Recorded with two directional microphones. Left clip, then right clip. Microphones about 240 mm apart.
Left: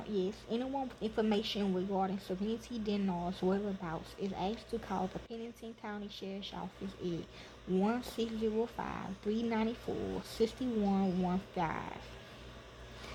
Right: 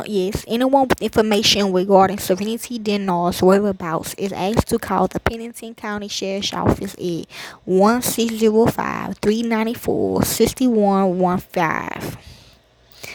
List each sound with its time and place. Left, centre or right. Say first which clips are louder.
0.0 s speech: right 15 dB; right